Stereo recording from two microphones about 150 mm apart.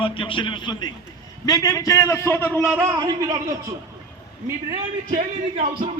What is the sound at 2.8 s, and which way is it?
Speech, 25° right (ahead or behind).